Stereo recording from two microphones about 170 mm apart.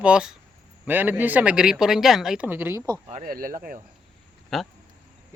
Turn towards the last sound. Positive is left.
turn(degrees=0)  # may be behind; listen again after turning